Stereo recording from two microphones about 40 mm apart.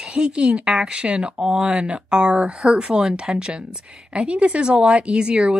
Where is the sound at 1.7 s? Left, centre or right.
Right.